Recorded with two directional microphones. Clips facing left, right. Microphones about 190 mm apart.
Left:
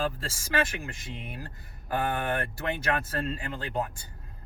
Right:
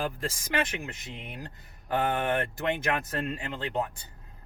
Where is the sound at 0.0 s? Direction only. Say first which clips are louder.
Left 1 dB; 20° right (ahead or behind).